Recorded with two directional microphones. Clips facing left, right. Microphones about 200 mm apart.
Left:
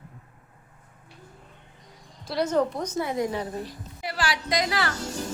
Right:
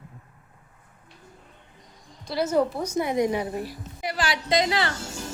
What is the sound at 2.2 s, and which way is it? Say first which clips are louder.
A woman's voice: right 1 dB; 5° right (ahead or behind).